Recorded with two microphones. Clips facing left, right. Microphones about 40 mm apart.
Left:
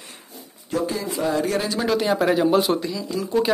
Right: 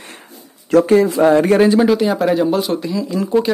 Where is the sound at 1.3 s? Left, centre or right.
Right.